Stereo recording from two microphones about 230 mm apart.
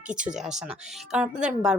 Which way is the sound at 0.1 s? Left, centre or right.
Right.